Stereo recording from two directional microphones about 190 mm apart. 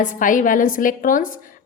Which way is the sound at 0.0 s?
45° left (ahead or behind).